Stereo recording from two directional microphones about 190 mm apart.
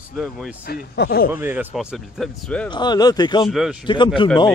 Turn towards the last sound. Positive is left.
turn(degrees=25)  # may be behind; listen again after turning